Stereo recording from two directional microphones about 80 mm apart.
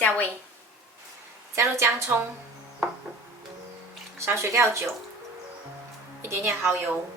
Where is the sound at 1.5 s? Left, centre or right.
Right.